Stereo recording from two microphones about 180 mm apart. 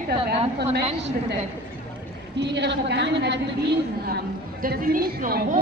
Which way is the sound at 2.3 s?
70° right (ahead or behind).